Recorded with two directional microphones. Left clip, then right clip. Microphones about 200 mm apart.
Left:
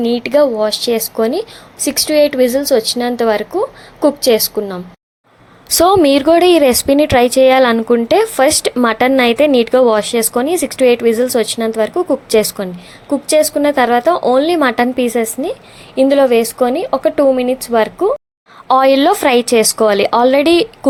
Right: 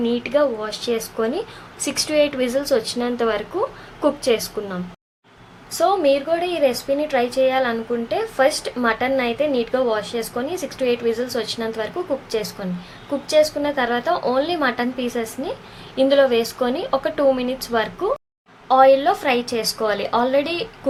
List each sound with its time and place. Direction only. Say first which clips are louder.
0.0 s speech: left 7 dB; 30° left (ahead or behind)
5.6 s a woman's voice: left 7 dB; 55° left (ahead or behind); by 18.1 s 30° left (ahead or behind)
18.7 s a woman's voice: left 4 dB; 50° left (ahead or behind)